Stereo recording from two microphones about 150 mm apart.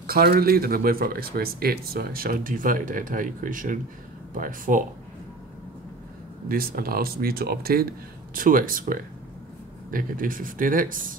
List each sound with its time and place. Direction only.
0.0 s speech: 90° right; by 4.8 s 65° right (ahead or behind)
6.5 s speech: 80° right
8.4 s speech: 65° right (ahead or behind)